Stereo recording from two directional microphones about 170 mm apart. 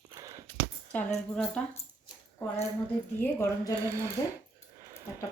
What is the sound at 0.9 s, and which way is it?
Speech, 5° left (ahead or behind).